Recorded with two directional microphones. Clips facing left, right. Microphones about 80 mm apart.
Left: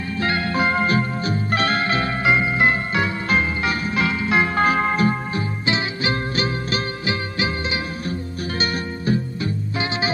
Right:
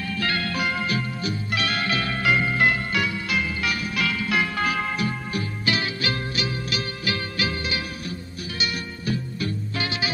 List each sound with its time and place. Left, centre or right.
0.2 s music: left
5.7 s music: left
6.3 s music: left
7.1 s music: left